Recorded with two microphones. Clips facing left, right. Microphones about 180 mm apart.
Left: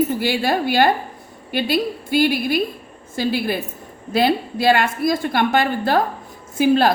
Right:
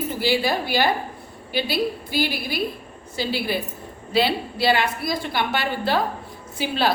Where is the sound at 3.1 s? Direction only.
50° left (ahead or behind).